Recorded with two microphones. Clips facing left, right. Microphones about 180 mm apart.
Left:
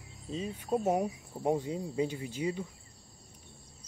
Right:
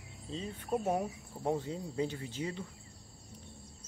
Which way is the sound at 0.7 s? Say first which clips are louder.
Left 3 dB; 20° left (ahead or behind).